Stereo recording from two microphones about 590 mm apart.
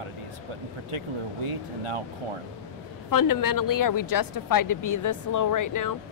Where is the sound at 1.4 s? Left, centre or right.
Right.